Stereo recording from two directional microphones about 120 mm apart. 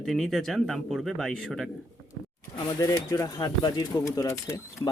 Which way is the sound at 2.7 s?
30° left (ahead or behind).